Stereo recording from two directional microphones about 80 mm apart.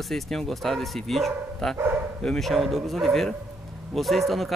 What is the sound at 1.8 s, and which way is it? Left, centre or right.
Bow-wow, right.